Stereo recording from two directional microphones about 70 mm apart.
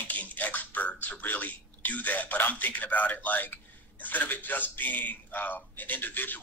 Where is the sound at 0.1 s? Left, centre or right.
Left.